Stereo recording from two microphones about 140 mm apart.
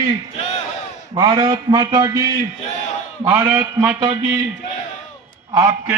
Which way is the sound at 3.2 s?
15° right (ahead or behind).